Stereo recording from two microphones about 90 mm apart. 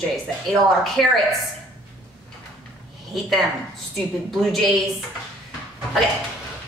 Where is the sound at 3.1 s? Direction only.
Centre (ahead or behind).